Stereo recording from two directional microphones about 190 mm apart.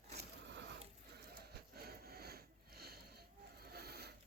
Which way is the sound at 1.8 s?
55° right (ahead or behind).